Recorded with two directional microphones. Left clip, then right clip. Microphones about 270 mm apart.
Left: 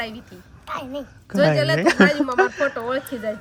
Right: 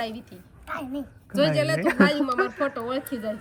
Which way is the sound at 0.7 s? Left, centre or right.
Centre.